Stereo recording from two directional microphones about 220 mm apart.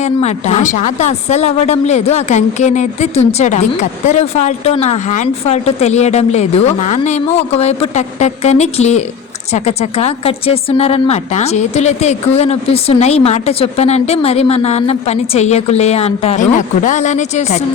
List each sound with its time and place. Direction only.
0.0 s a woman's voice: 30° left (ahead or behind)